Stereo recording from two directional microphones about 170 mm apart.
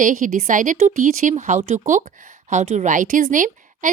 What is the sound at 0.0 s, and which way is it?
Speech, 50° right (ahead or behind).